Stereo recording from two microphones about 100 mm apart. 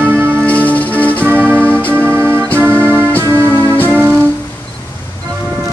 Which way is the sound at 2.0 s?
25° right (ahead or behind).